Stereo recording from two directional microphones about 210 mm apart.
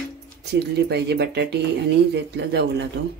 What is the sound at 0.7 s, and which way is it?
Speech, 50° right (ahead or behind).